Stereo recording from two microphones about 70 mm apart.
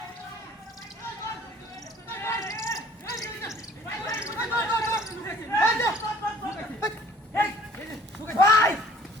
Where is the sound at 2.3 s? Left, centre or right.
Left.